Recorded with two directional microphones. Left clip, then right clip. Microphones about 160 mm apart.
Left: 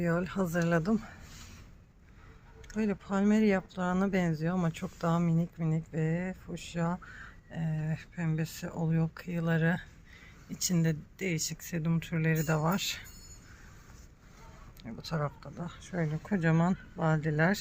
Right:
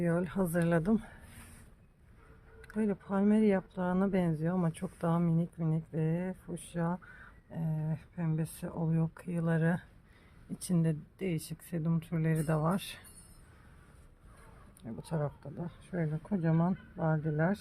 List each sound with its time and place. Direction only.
0.0 s speech: 5° right (ahead or behind)
2.7 s speech: centre (ahead or behind)
14.8 s speech: 10° right (ahead or behind)
16.1 s speech: 20° left (ahead or behind)
16.6 s speech: 25° left (ahead or behind)
17.2 s speech: 10° left (ahead or behind)